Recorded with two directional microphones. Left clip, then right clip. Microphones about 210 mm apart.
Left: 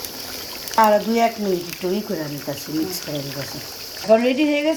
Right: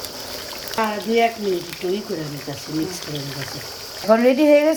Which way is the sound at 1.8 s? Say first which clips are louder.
Even; 35° left (ahead or behind).